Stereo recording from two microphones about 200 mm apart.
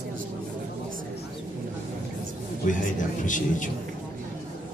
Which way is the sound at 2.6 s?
40° left (ahead or behind).